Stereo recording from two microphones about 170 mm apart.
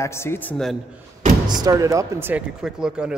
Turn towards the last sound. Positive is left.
turn(degrees=-5)  # may be behind; listen again after turning